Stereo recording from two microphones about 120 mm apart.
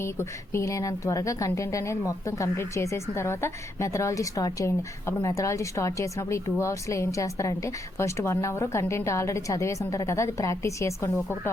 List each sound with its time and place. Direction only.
0.0 s a woman's voice: 20° left (ahead or behind)